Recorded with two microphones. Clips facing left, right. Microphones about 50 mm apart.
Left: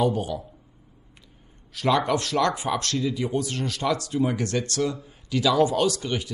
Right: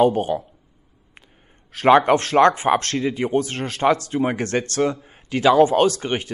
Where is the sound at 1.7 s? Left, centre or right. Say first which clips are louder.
Right 8 dB; right.